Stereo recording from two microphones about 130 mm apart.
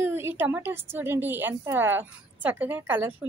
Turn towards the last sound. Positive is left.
turn(degrees=-15)  # may be behind; listen again after turning